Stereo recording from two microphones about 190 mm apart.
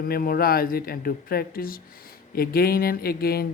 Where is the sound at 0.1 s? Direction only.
50° left (ahead or behind).